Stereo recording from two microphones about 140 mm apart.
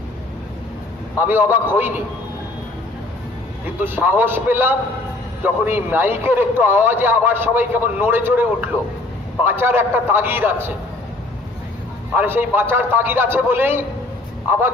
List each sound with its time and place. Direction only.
1.2 s a man's voice: 15° right (ahead or behind)
3.8 s a man's voice: 15° right (ahead or behind)
12.1 s a man's voice: 15° right (ahead or behind)